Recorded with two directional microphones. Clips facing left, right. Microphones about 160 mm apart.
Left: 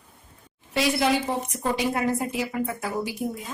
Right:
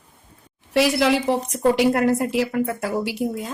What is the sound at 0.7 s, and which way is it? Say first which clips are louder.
A woman's voice: right 5 dB; 70° right (ahead or behind).